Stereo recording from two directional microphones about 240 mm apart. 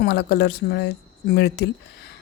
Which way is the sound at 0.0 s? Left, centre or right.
Left.